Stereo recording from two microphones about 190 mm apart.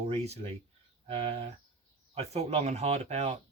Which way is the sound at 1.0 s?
30° right (ahead or behind).